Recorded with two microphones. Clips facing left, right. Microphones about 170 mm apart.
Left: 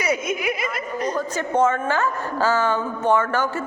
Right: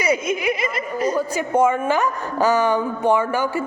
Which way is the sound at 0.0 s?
Centre (ahead or behind).